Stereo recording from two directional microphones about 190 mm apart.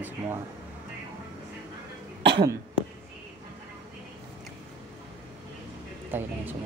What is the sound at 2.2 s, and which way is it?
Cough, 25° right (ahead or behind).